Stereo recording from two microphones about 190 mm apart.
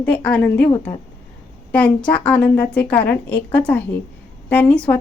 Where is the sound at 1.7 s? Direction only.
5° left (ahead or behind).